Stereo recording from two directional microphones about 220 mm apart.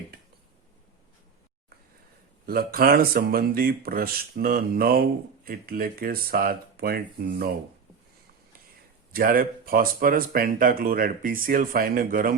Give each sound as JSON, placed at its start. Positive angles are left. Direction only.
{"t": 2.5, "sound": "speech", "side_deg": -45}
{"t": 9.1, "sound": "speech", "side_deg": -40}